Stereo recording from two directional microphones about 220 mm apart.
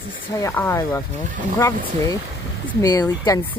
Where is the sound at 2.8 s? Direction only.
15° left (ahead or behind).